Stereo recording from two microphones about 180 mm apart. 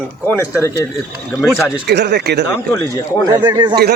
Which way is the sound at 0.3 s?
15° left (ahead or behind).